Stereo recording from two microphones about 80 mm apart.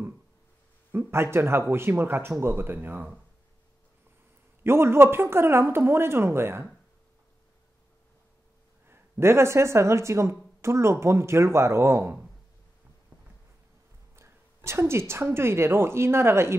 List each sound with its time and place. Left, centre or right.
0.9 s speech: right
4.6 s speech: right
8.8 s speech: right
14.1 s a woman's voice: right